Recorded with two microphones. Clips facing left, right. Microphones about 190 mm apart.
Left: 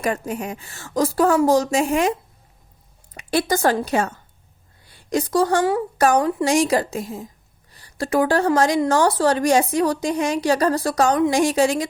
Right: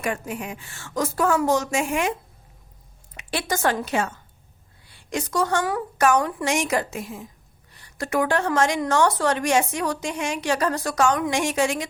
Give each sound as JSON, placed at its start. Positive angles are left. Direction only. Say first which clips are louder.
{"t": 0.0, "sound": "a woman's voice", "louder": "left 4 dB", "side_deg": 40}
{"t": 3.2, "sound": "a woman's voice", "louder": "left 6 dB", "side_deg": 40}